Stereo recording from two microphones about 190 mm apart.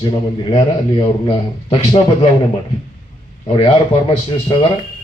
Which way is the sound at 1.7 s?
30° left (ahead or behind).